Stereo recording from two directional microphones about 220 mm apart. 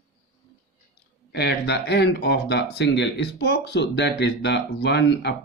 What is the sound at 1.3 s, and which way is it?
Speech, 50° left (ahead or behind).